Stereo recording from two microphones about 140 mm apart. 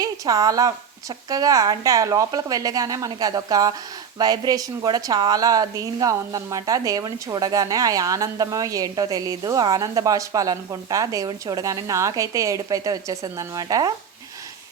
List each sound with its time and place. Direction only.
0.0 s a woman's voice: 25° right (ahead or behind)